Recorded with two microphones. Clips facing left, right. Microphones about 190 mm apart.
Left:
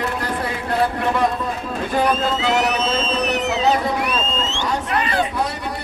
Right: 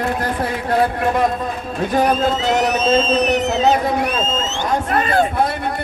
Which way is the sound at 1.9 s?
45° right (ahead or behind).